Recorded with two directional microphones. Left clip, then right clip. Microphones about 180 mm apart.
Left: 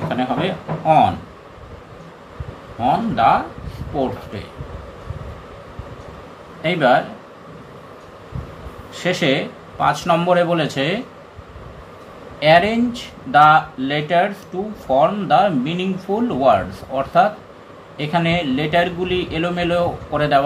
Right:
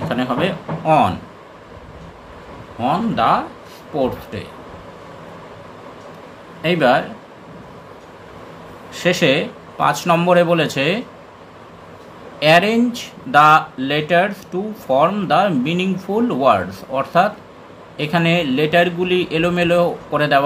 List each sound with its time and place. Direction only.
0.1 s speech: 30° right (ahead or behind)
2.8 s speech: 25° right (ahead or behind)
6.6 s speech: 25° right (ahead or behind)
8.9 s speech: 25° right (ahead or behind)
12.4 s speech: 25° right (ahead or behind)